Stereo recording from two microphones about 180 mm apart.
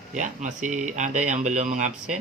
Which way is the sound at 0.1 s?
40° right (ahead or behind).